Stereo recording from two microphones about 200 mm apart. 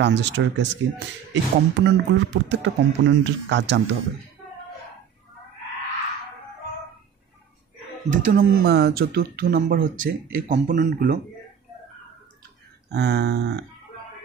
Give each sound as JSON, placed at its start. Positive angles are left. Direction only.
{"t": 0.0, "sound": "speech", "side_deg": -60}
{"t": 8.1, "sound": "speech", "side_deg": -45}
{"t": 12.9, "sound": "speech", "side_deg": -55}